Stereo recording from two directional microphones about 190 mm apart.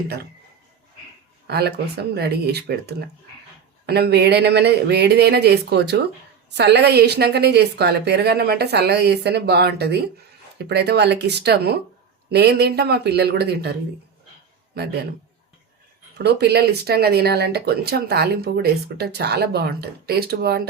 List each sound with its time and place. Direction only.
1.5 s speech: 60° right (ahead or behind)
16.1 s speech: 60° right (ahead or behind)